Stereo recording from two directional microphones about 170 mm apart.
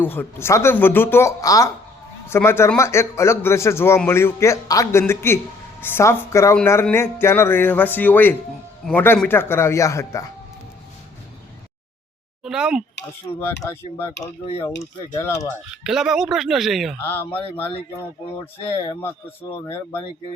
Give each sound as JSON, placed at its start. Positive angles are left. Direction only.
{"t": 0.0, "sound": "a man's voice", "side_deg": 10}
{"t": 12.4, "sound": "speech", "side_deg": -5}
{"t": 13.2, "sound": "a man's voice", "side_deg": 15}
{"t": 15.7, "sound": "speech", "side_deg": -5}
{"t": 17.0, "sound": "a man's voice", "side_deg": 10}
{"t": 19.6, "sound": "a man's voice", "side_deg": 15}